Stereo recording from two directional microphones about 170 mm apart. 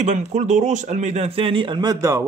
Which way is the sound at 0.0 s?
45° right (ahead or behind).